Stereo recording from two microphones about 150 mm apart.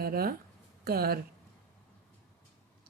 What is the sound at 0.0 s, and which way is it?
Speech, 80° right.